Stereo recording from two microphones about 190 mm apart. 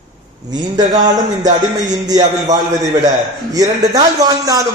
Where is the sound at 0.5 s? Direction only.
20° right (ahead or behind).